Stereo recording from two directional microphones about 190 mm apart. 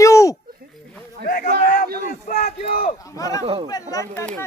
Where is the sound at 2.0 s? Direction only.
40° left (ahead or behind).